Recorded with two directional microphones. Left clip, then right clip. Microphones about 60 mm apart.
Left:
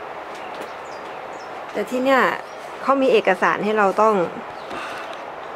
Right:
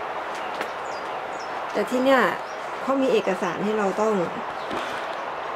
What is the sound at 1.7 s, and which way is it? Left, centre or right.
Speech, centre.